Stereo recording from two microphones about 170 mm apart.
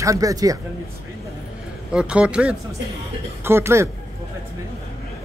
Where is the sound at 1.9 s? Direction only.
5° right (ahead or behind).